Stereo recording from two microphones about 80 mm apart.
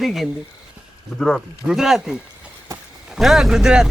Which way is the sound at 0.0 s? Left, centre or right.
Centre.